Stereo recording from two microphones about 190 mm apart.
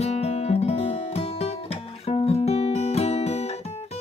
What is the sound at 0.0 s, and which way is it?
Music, 35° left (ahead or behind).